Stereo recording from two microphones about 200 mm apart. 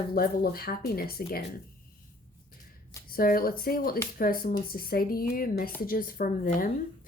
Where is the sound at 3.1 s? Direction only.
45° left (ahead or behind).